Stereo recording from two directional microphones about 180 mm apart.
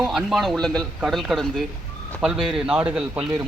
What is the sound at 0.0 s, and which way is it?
A man's voice, centre (ahead or behind).